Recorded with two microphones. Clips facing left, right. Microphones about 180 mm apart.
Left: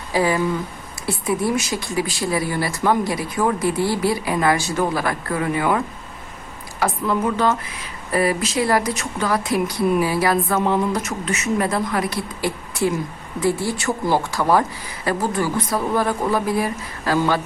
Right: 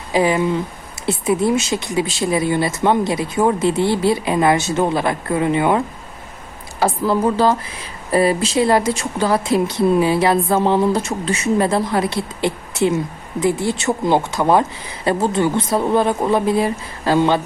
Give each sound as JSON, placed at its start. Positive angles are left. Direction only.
{"t": 0.1, "sound": "a woman's voice", "side_deg": -20}